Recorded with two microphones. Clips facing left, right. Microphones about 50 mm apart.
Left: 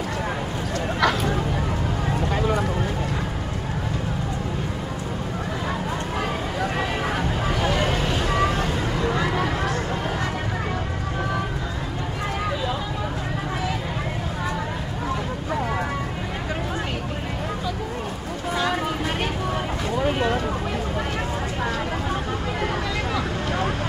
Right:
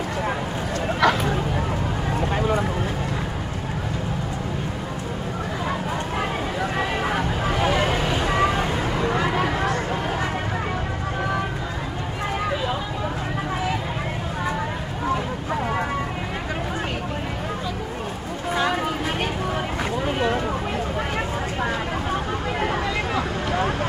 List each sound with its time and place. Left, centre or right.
1.0 s a sound: centre
2.1 s vehicle: centre
6.6 s vehicle: centre
18.5 s vehicle: centre
20.0 s vehicle: centre